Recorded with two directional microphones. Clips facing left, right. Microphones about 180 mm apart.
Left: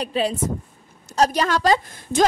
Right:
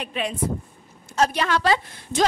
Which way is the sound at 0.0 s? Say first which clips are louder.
Left 4 dB; 35° left (ahead or behind).